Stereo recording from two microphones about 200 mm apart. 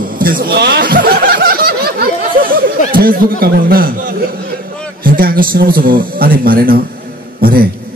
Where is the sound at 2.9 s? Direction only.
45° right (ahead or behind).